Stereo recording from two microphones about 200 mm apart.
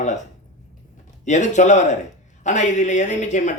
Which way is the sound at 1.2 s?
35° left (ahead or behind).